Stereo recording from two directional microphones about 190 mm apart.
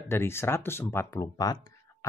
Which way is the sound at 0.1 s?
10° left (ahead or behind).